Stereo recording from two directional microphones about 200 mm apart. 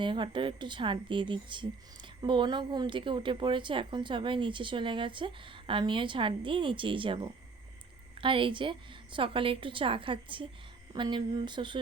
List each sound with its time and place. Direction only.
0.0 s speech: 25° right (ahead or behind)